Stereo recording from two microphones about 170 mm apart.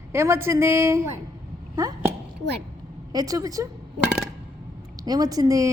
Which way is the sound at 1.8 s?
20° right (ahead or behind).